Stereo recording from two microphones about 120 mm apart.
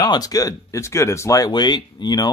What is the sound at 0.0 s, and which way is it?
Speech, 30° left (ahead or behind).